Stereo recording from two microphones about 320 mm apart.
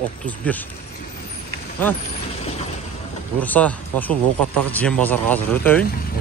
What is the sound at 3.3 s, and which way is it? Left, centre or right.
Speech, centre.